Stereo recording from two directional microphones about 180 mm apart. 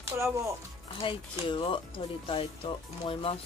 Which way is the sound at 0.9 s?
25° left (ahead or behind).